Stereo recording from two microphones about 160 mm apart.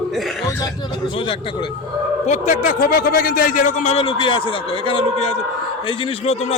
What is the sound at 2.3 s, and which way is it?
A man's voice, 50° left (ahead or behind).